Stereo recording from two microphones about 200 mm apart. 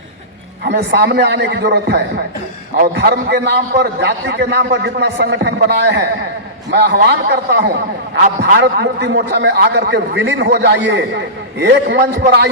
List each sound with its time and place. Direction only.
0.6 s a man's voice: 60° right (ahead or behind)